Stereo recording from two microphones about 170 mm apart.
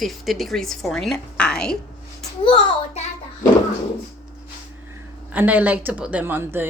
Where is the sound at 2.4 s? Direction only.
40° left (ahead or behind).